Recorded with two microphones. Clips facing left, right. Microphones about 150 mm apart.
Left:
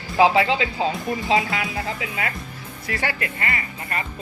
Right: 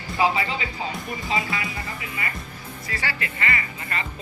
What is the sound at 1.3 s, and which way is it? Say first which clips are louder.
Speech: left 5 dB; 75° left (ahead or behind).